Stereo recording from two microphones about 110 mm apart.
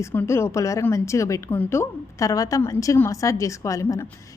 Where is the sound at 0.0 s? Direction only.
20° left (ahead or behind).